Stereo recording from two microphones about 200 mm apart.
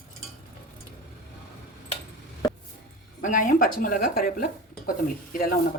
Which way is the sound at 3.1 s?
40° left (ahead or behind).